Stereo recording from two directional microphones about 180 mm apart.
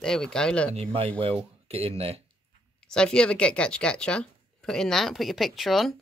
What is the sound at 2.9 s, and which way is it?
Speech, 5° left (ahead or behind).